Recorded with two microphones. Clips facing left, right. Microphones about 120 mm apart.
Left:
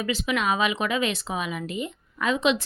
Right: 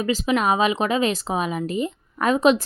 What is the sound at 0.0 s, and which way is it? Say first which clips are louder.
Speech: right 5 dB; 40° right (ahead or behind).